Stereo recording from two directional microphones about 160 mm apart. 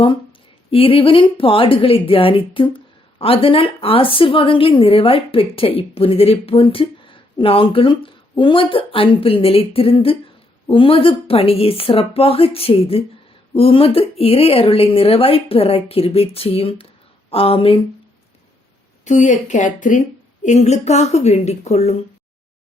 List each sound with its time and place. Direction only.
0.7 s a woman's voice: 35° left (ahead or behind)
19.0 s a woman's voice: 50° left (ahead or behind)